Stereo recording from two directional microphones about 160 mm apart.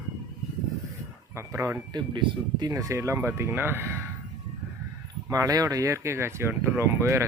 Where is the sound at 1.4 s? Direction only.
15° right (ahead or behind).